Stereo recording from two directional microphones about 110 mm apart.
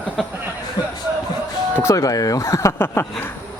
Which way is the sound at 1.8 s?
30° left (ahead or behind).